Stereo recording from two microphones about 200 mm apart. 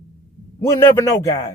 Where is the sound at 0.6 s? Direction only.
15° left (ahead or behind).